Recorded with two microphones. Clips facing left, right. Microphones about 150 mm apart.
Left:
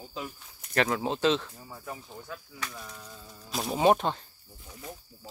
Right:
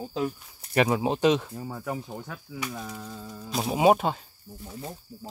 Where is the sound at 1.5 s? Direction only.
80° right.